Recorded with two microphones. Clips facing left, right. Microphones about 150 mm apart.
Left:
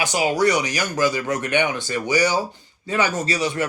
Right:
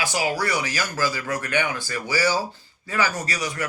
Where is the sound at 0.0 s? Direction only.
20° left (ahead or behind).